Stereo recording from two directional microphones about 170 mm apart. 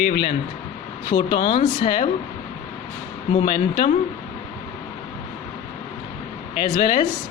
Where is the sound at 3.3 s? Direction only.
30° left (ahead or behind).